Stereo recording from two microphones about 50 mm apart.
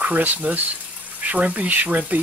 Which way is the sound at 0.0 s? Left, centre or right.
Right.